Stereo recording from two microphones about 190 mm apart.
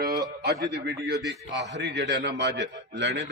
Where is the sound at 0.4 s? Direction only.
60° right (ahead or behind).